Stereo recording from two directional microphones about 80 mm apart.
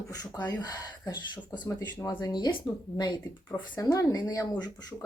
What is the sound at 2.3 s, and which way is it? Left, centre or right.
Speech, left.